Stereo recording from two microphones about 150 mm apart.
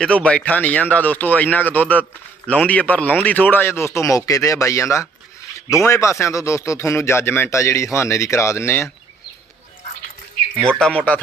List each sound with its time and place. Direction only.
0.0 s speech: 5° left (ahead or behind)
10.7 s speech: 5° left (ahead or behind)